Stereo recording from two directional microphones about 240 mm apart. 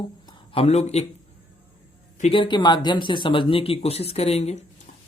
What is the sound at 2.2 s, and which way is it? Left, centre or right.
Speech, left.